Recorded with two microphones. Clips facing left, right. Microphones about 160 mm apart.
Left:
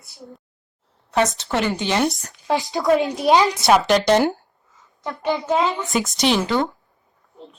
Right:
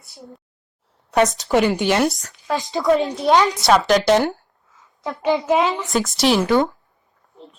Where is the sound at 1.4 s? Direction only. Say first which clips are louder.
Right 5 dB; 15° right (ahead or behind); by 3.1 s 5° left (ahead or behind).